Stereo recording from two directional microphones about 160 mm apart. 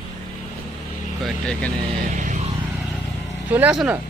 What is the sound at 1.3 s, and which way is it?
Speech, 5° left (ahead or behind).